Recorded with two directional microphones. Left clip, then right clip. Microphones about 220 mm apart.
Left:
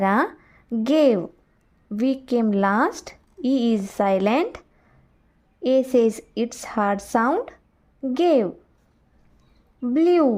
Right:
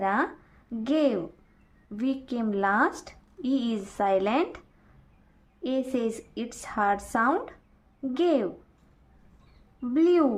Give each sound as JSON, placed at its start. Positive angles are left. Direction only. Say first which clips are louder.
{"t": 0.0, "sound": "a woman's voice", "louder": "left 6 dB", "side_deg": 40}
{"t": 5.6, "sound": "a woman's voice", "louder": "left 10 dB", "side_deg": 35}
{"t": 9.9, "sound": "a woman's voice", "louder": "left 4 dB", "side_deg": 30}